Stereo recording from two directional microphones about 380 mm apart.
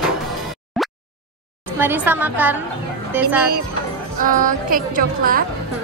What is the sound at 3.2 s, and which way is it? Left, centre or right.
Speech, centre.